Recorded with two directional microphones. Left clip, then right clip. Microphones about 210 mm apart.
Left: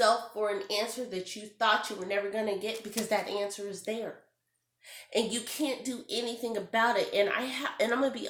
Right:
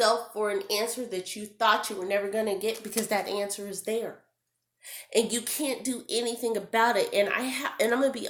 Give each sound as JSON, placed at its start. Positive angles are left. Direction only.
{"t": 0.0, "sound": "speech", "side_deg": -45}
{"t": 5.1, "sound": "speech", "side_deg": -45}